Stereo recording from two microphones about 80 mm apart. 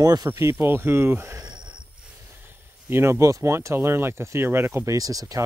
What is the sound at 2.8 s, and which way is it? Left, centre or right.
Speech, right.